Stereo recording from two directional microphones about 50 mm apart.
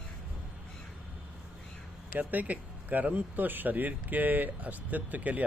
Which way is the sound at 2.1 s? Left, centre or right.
Right.